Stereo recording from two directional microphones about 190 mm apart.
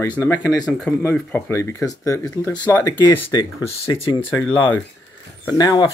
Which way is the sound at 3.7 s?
30° left (ahead or behind).